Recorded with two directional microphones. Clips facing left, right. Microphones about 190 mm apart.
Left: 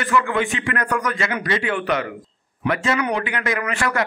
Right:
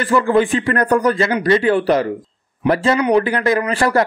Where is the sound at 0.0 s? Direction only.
35° right (ahead or behind).